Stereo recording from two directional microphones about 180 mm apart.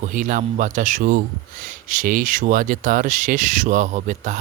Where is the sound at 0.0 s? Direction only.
45° right (ahead or behind).